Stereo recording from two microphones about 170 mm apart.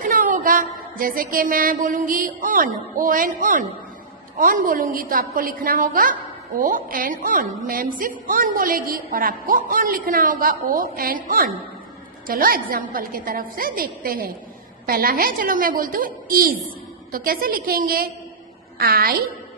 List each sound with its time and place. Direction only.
0.0 s a woman's voice: 50° right (ahead or behind)